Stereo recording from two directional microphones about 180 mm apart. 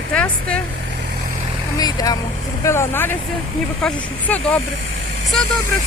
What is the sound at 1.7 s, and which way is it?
Speech, 20° left (ahead or behind).